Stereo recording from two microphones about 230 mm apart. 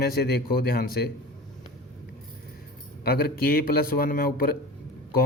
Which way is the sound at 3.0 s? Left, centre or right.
Left.